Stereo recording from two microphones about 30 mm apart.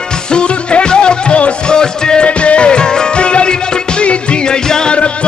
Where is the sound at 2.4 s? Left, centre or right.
Left.